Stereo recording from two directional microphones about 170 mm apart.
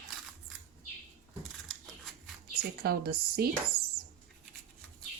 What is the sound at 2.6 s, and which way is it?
Speech, 65° right (ahead or behind).